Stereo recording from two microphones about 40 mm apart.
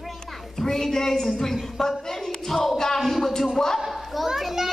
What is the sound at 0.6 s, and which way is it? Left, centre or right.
A man's voice, centre.